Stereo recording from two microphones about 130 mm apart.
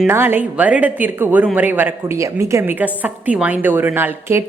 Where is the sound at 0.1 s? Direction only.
15° right (ahead or behind).